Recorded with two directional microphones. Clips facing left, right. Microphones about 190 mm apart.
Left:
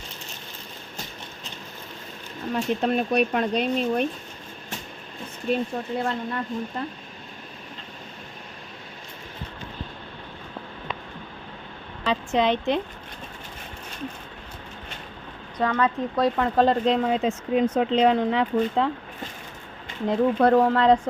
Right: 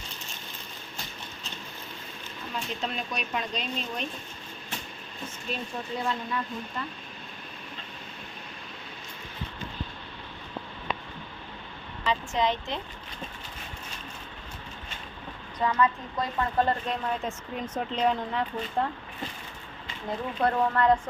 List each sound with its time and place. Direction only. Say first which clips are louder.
2.5 s speech: left 11 dB; 50° left (ahead or behind)
5.5 s speech: left 9 dB; 60° left (ahead or behind)
12.3 s speech: left 9 dB; 65° left (ahead or behind)
15.6 s speech: left 3 dB; 75° left (ahead or behind); by 18.9 s 90° left
20.1 s speech: left 9 dB; 75° left (ahead or behind)